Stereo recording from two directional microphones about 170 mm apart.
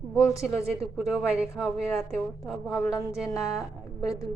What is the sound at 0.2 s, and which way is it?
Speech, 15° left (ahead or behind).